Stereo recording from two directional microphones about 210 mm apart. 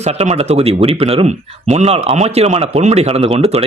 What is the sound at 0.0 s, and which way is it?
Speech, 30° right (ahead or behind).